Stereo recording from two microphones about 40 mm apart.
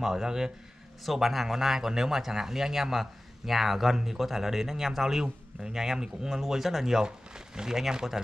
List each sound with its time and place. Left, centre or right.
0.0 s speech: centre